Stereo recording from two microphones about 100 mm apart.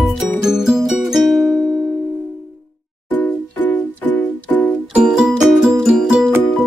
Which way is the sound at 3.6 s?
20° left (ahead or behind).